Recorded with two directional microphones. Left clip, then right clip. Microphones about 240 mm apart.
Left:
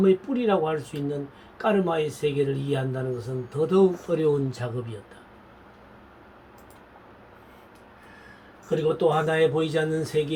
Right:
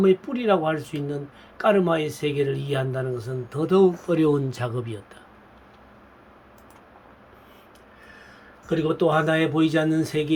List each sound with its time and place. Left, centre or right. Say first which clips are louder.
0.0 s a man's voice: right 1 dB; right
9.0 s a man's voice: right 1 dB; right